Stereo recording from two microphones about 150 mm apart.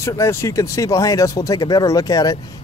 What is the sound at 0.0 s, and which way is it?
Speech, 20° left (ahead or behind).